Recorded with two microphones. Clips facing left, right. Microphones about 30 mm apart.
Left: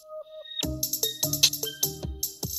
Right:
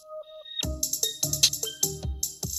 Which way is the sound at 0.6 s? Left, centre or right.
Centre.